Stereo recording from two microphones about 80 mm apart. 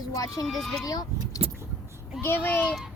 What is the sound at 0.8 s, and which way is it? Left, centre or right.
Speech, left.